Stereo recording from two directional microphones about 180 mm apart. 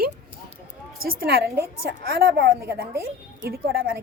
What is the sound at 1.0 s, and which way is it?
Speech, 55° right (ahead or behind).